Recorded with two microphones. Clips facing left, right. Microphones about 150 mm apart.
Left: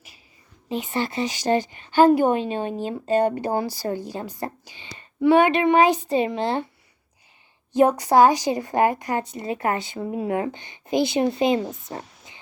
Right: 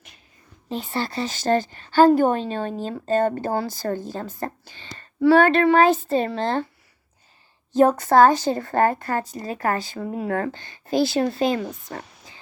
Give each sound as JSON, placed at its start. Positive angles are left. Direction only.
{"t": 0.9, "sound": "speech", "side_deg": 20}
{"t": 7.7, "sound": "a woman's voice", "side_deg": 15}